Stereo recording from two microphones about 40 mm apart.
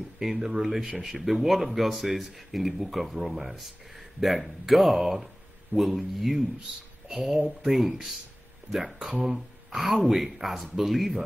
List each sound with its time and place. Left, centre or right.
0.2 s speech: centre
0.9 s speech: centre
1.2 s speech: centre